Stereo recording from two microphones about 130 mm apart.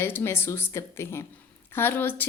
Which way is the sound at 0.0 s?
20° left (ahead or behind).